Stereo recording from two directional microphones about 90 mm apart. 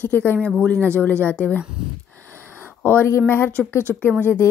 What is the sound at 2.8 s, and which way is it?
Speech, 25° left (ahead or behind).